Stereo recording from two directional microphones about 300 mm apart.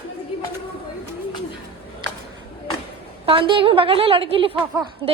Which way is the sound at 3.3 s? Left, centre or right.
Centre.